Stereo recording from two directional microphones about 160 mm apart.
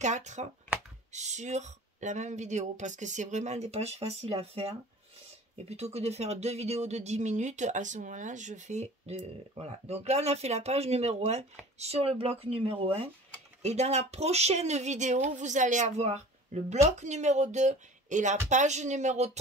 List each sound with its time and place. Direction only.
0.0 s speech: 45° right (ahead or behind)